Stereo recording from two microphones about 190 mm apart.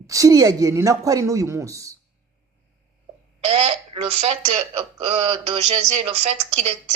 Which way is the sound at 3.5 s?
30° right (ahead or behind).